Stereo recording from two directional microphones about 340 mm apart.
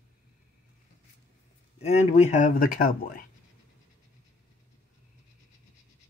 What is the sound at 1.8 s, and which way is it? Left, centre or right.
Speech, centre.